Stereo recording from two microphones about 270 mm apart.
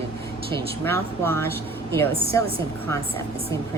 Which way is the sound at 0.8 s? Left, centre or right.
Centre.